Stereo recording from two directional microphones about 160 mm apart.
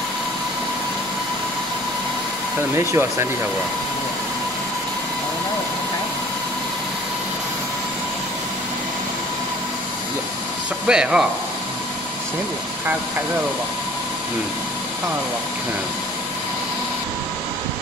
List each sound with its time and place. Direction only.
2.7 s speech: 15° right (ahead or behind)
10.9 s speech: 5° right (ahead or behind)